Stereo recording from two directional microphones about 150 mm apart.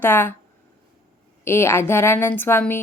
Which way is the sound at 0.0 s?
15° left (ahead or behind).